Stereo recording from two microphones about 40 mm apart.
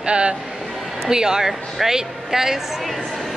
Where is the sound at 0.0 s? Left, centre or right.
Right.